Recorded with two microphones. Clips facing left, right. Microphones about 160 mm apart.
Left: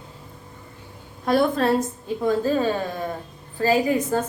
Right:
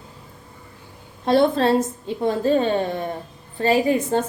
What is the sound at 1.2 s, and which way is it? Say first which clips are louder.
A woman's voice: right 3 dB; 25° right (ahead or behind).